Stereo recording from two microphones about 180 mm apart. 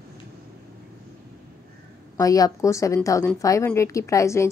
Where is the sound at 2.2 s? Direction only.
20° left (ahead or behind).